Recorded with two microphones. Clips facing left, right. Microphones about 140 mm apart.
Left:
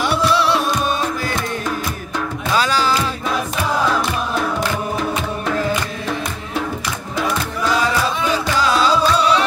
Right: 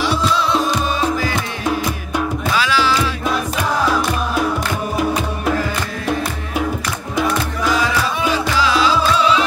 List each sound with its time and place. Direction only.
0.0 s music: 65° left (ahead or behind)
2.5 s music: 40° left (ahead or behind)